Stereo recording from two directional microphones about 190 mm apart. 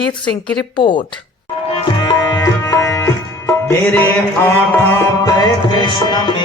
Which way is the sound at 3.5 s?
10° left (ahead or behind).